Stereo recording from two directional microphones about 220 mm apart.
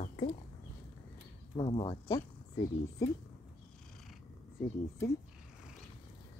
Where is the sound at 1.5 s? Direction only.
20° left (ahead or behind).